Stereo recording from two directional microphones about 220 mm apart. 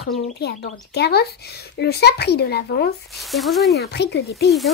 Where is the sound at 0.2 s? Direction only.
50° left (ahead or behind).